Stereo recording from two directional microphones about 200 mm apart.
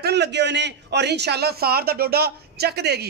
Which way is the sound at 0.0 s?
55° right (ahead or behind).